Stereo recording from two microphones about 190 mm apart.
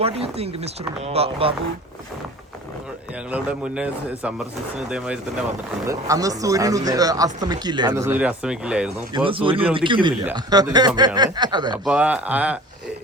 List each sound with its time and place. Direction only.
0.0 s speech: 30° right (ahead or behind)
3.3 s speech: 5° right (ahead or behind)
5.8 s speech: 15° right (ahead or behind)
9.1 s speech: 25° right (ahead or behind)
11.7 s speech: 5° right (ahead or behind)